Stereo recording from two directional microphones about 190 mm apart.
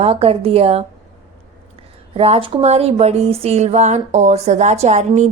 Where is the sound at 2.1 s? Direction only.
30° right (ahead or behind).